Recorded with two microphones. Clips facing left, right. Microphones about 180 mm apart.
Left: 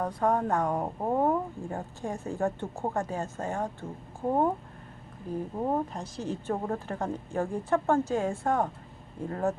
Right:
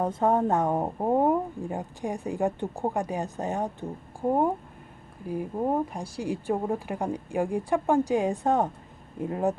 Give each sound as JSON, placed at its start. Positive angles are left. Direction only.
{"t": 0.0, "sound": "speech", "side_deg": -25}
{"t": 5.3, "sound": "speech", "side_deg": -10}